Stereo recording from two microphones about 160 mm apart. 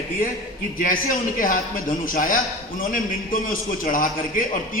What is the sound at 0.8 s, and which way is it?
A man's voice, 60° left (ahead or behind).